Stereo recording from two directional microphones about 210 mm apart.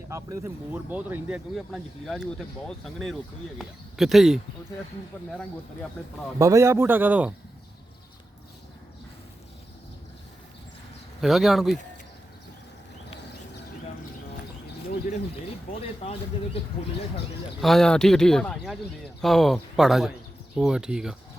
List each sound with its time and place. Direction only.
0.1 s speech: 15° right (ahead or behind)
6.4 s a man's voice: 15° right (ahead or behind)
11.2 s speech: centre (ahead or behind)
15.8 s speech: 30° left (ahead or behind)
17.6 s speech: centre (ahead or behind)